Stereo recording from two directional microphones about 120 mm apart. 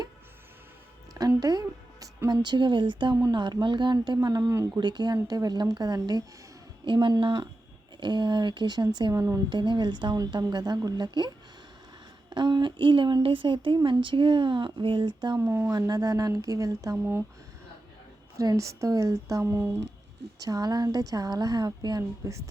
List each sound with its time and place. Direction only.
1.2 s a woman's voice: 30° right (ahead or behind)
4.8 s speech: 35° right (ahead or behind)
9.5 s speech: 40° right (ahead or behind)
12.3 s speech: 40° right (ahead or behind)
13.7 s speech: 30° right (ahead or behind)
14.0 s speech: 45° right (ahead or behind)
15.4 s speech: 20° right (ahead or behind)
15.7 s speech: 30° right (ahead or behind)
18.3 s speech: 25° right (ahead or behind)